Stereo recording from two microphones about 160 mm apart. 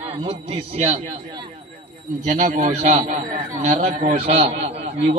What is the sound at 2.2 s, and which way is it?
A man's voice, 50° right (ahead or behind).